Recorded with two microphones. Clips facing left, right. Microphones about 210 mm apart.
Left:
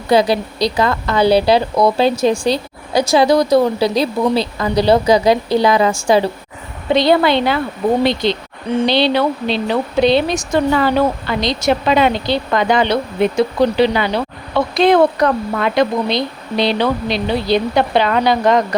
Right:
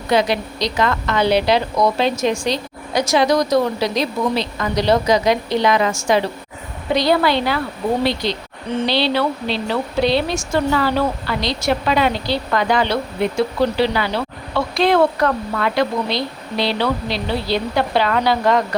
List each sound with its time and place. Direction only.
0.1 s a woman's voice: 35° left (ahead or behind)